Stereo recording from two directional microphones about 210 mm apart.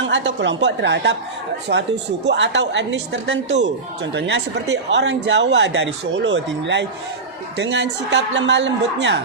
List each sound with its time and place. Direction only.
0.0 s speech: 60° right (ahead or behind)